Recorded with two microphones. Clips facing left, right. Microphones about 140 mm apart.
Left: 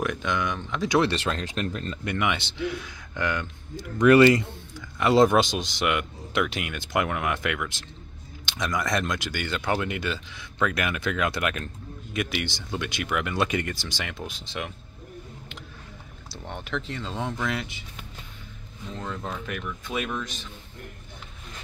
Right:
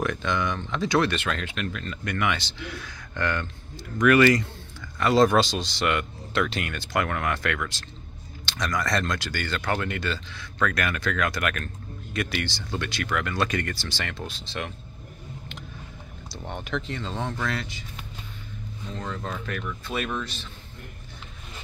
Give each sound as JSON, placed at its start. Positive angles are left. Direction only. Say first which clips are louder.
{"t": 0.0, "sound": "speech", "louder": "right 1 dB", "side_deg": 10}
{"t": 1.1, "sound": "speech", "louder": "left 1 dB", "side_deg": 35}
{"t": 2.1, "sound": "speech", "louder": "even", "side_deg": 20}
{"t": 4.0, "sound": "speech", "louder": "left 2 dB", "side_deg": 25}
{"t": 8.7, "sound": "speech", "louder": "even", "side_deg": 20}
{"t": 16.4, "sound": "speech", "louder": "right 1 dB", "side_deg": 0}
{"t": 18.9, "sound": "speech", "louder": "even", "side_deg": 5}